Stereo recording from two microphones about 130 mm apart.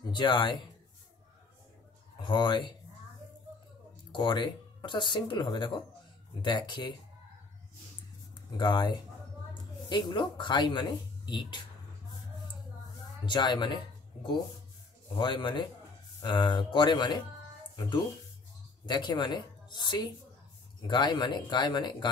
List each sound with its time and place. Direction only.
0.1 s speech: 35° left (ahead or behind)
2.2 s speech: 35° left (ahead or behind)
4.1 s speech: 35° left (ahead or behind)
8.5 s speech: 35° left (ahead or behind)
13.2 s speech: 35° left (ahead or behind)
15.1 s speech: 40° left (ahead or behind)